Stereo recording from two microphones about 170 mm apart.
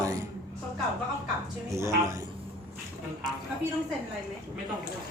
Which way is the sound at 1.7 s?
15° right (ahead or behind).